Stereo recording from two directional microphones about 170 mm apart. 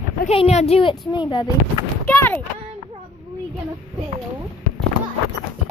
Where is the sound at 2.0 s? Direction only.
10° left (ahead or behind).